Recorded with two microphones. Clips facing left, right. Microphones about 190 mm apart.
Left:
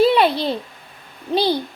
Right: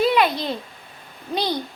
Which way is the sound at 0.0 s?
30° left (ahead or behind).